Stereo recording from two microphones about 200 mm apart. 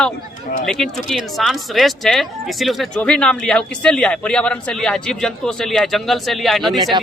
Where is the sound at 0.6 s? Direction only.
Centre (ahead or behind).